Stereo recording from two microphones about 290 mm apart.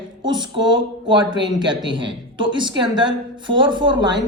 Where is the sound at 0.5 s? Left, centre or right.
Centre.